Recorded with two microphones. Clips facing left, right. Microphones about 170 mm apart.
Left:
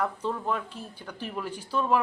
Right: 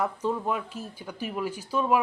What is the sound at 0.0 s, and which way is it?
Speech, 10° right (ahead or behind).